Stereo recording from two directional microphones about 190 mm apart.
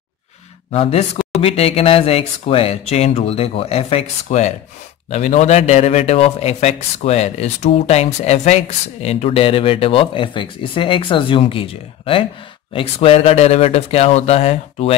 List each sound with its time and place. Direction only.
0.7 s a man's voice: 30° left (ahead or behind)